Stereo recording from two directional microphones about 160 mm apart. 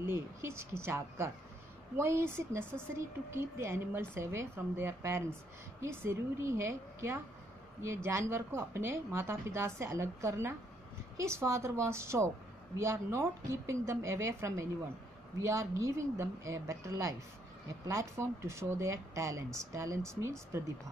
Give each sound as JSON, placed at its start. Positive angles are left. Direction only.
{"t": 0.0, "sound": "speech", "side_deg": -15}